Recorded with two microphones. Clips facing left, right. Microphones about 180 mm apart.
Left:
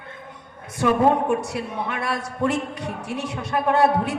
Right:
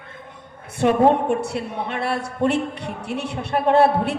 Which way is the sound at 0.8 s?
30° right (ahead or behind).